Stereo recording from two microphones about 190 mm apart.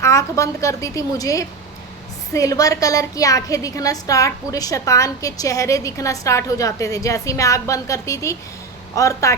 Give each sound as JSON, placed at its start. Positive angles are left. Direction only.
{"t": 0.0, "sound": "a woman's voice", "side_deg": 15}